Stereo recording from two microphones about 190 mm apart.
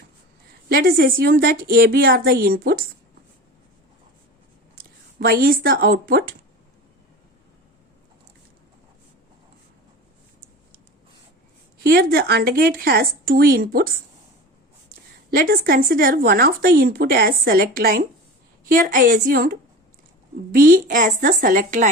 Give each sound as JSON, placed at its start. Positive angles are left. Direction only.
{"t": 0.7, "sound": "a woman's voice", "side_deg": -50}
{"t": 5.2, "sound": "a woman's voice", "side_deg": -50}
{"t": 11.8, "sound": "a woman's voice", "side_deg": -55}
{"t": 15.3, "sound": "a woman's voice", "side_deg": -55}